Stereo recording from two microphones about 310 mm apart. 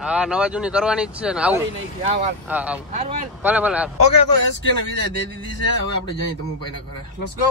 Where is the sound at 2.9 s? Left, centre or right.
Right.